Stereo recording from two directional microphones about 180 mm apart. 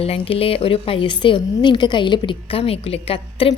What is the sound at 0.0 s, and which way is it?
A woman's voice, 30° left (ahead or behind).